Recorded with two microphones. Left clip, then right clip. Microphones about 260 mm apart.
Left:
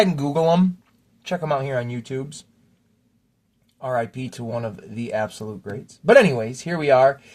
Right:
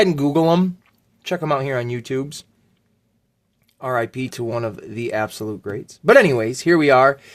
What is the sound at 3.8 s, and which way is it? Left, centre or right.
Speech, right.